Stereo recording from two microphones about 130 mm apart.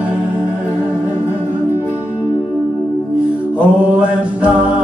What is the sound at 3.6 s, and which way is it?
Mantra, 10° right (ahead or behind).